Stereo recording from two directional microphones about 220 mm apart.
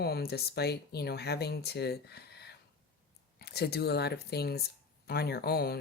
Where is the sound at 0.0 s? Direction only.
45° left (ahead or behind).